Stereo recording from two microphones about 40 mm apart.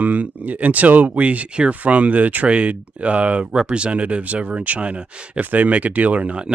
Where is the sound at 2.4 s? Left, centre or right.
Right.